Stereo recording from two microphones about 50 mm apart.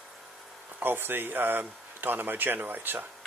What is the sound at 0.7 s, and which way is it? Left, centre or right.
Speech, right.